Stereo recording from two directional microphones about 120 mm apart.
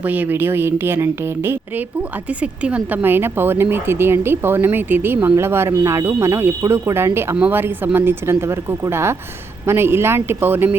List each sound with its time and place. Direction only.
0.0 s speech: 15° right (ahead or behind)